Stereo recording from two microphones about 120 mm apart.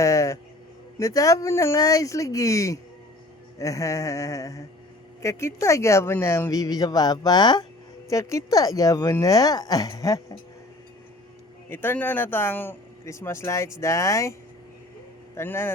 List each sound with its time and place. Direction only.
0.0 s a sound: 25° left (ahead or behind)
0.9 s speech: 30° left (ahead or behind)
8.1 s speech: 25° left (ahead or behind)
11.7 s speech: 15° left (ahead or behind)
15.4 s speech: 20° left (ahead or behind)